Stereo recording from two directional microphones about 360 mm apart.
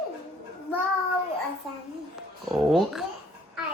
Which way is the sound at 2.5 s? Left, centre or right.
Centre.